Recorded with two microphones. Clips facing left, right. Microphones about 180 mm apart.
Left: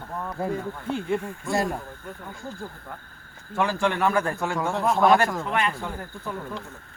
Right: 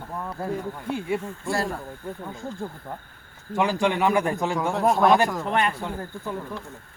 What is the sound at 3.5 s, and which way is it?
A man's voice, 15° right (ahead or behind).